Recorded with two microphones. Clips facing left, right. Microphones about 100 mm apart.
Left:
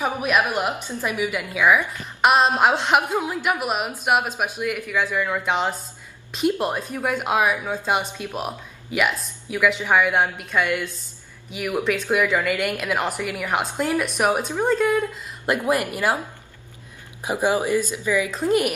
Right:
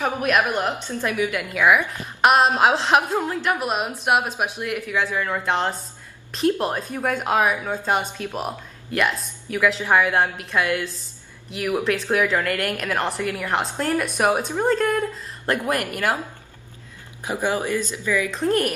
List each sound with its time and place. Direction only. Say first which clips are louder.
0.0 s a woman's voice: right 1 dB; 10° left (ahead or behind)
1.6 s a woman's voice: even; 15° right (ahead or behind)
2.2 s a woman's voice: right 1 dB; centre (ahead or behind)
17.2 s a woman's voice: left 2 dB; 15° left (ahead or behind)